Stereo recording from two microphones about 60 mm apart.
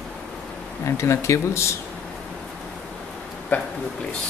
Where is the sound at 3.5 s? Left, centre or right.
Left.